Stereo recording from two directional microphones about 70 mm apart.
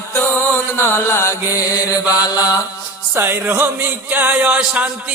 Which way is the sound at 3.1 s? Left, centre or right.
Right.